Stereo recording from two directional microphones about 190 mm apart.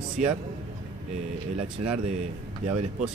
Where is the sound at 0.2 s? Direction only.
40° right (ahead or behind).